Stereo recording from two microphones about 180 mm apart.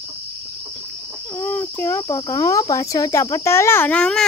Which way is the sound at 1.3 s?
10° left (ahead or behind).